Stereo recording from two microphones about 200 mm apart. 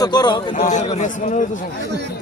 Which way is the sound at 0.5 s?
35° left (ahead or behind).